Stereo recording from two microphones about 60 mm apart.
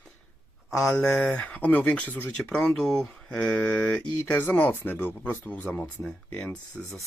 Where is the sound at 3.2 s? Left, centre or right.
Left.